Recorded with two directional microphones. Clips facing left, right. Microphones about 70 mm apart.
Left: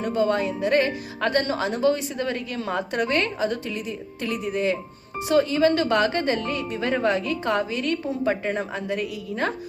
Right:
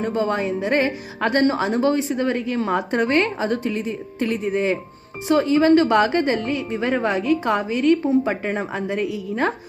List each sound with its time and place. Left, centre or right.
0.0 s a woman's voice: right